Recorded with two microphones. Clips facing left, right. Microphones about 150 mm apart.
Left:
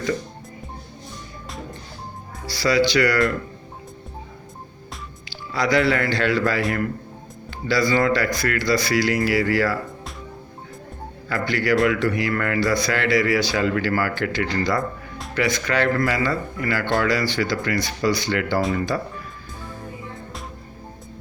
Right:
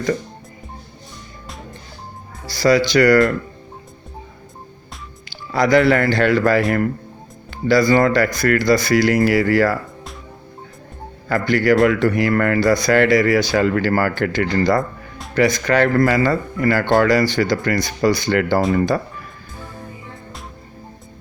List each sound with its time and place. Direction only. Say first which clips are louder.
2.5 s speech: right 4 dB; 45° right (ahead or behind)
5.5 s speech: right 6 dB; 50° right (ahead or behind)
7.7 s speech: right 5 dB; 50° right (ahead or behind)
11.3 s speech: right 6 dB; 50° right (ahead or behind)